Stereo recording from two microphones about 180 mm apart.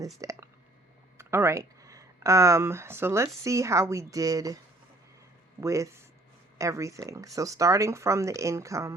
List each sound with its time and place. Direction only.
0.2 s speech: 20° right (ahead or behind)
5.5 s speech: 15° right (ahead or behind)